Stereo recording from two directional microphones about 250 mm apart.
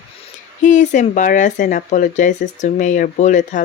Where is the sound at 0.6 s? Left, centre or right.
Left.